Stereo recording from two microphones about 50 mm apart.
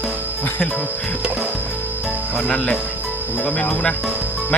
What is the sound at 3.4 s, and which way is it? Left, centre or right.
Speech, left.